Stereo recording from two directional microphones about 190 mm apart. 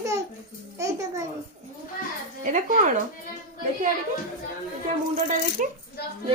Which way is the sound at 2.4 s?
40° right (ahead or behind).